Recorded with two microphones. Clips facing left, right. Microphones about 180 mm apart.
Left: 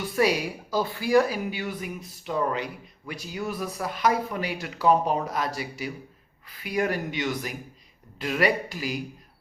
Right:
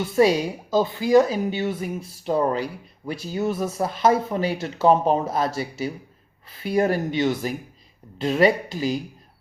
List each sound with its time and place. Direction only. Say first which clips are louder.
0.2 s speech: right 5 dB; 25° right (ahead or behind)